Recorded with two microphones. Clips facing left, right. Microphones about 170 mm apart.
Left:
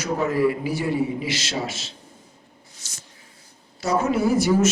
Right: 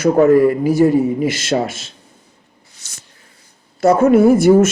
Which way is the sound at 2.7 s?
65° right (ahead or behind).